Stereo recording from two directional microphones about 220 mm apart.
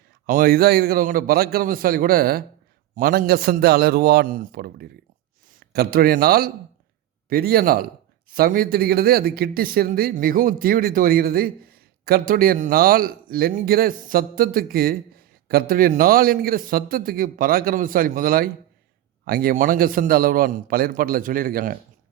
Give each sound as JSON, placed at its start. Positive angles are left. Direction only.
{"t": 0.3, "sound": "a man's voice", "side_deg": -40}